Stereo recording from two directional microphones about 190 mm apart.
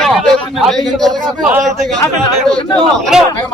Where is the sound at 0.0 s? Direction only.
Centre (ahead or behind).